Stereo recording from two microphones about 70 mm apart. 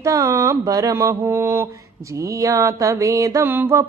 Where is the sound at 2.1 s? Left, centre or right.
Right.